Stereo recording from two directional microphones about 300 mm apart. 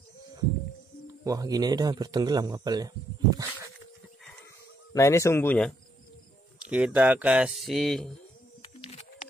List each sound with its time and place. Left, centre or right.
1.2 s speech: centre
4.9 s speech: centre
8.8 s a sound: left